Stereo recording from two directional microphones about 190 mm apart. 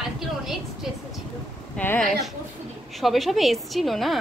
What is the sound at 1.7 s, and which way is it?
A woman's voice, 10° left (ahead or behind).